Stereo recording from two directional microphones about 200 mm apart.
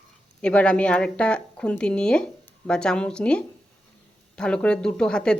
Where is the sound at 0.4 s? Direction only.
5° left (ahead or behind).